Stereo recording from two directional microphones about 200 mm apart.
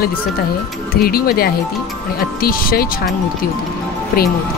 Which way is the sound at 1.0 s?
50° left (ahead or behind).